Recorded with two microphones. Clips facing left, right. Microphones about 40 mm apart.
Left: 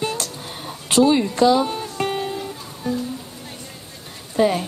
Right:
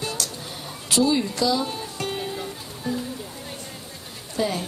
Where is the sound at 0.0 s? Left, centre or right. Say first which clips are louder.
Left 5 dB; left.